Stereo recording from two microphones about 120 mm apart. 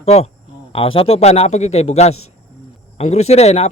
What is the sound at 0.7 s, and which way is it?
A man's voice, 50° left (ahead or behind).